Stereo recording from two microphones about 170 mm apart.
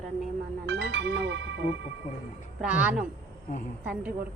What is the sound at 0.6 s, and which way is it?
Speech, 90° right.